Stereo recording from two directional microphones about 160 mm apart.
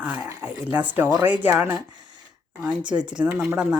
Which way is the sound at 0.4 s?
10° right (ahead or behind).